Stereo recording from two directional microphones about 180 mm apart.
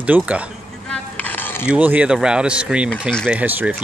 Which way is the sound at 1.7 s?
10° right (ahead or behind).